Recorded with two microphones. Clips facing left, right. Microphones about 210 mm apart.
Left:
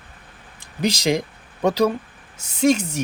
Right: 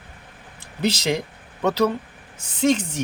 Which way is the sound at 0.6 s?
10° left (ahead or behind).